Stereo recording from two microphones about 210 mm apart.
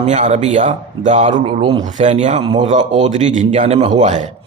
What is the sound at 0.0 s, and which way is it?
A man's voice, 30° right (ahead or behind).